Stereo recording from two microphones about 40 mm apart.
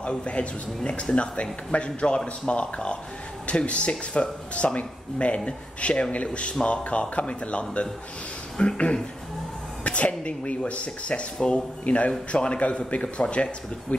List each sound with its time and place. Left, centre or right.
0.0 s a man's voice: left
11.8 s a man's voice: left